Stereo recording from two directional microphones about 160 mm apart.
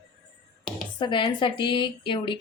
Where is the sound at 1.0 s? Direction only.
30° left (ahead or behind).